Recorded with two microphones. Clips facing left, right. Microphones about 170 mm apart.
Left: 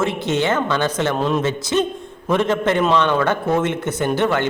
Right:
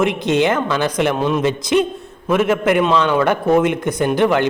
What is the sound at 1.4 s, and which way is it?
A man's voice, 15° right (ahead or behind).